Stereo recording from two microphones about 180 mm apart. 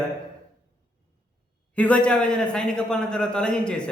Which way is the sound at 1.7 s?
5° left (ahead or behind).